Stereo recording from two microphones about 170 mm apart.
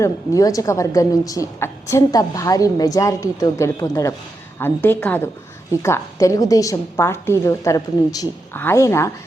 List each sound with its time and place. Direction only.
0.0 s a woman's voice: 20° left (ahead or behind)